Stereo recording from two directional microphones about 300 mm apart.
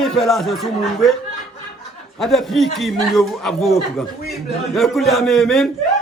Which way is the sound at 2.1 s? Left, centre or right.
Centre.